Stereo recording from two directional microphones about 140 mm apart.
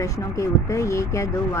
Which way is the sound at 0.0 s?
20° left (ahead or behind).